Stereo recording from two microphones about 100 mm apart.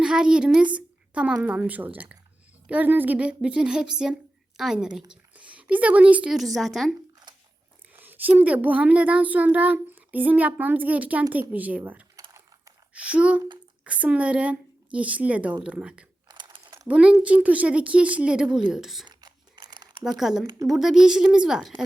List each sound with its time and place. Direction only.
0.0 s a child's voice: 5° right (ahead or behind)
6.3 s a woman's voice: centre (ahead or behind)
7.9 s a child's voice: 20° right (ahead or behind)
16.3 s a sound: 50° right (ahead or behind)
16.9 s a child's voice: 10° right (ahead or behind)
19.0 s a sound: 45° right (ahead or behind)
20.1 s a woman's voice: 5° right (ahead or behind)